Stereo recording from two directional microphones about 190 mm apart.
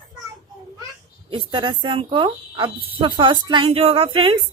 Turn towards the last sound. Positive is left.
turn(degrees=-25)  # may be behind; listen again after turning